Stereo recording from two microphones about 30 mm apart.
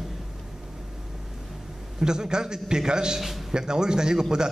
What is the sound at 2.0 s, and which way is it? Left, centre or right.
A man's voice, right.